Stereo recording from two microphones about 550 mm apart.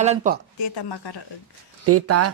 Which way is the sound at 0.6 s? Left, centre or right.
Left.